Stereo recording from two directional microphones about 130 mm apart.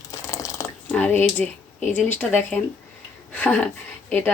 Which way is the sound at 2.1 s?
15° left (ahead or behind).